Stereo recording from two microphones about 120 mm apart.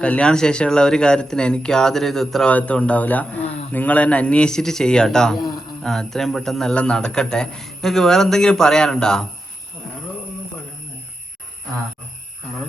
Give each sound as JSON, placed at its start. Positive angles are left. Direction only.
{"t": 0.0, "sound": "a man's voice", "side_deg": 10}